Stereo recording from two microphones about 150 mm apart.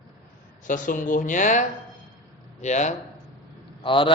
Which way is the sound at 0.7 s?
60° left (ahead or behind).